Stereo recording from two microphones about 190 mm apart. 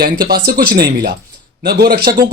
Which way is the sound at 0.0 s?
55° right (ahead or behind).